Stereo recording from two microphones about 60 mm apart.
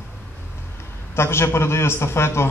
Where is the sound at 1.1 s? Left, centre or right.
Left.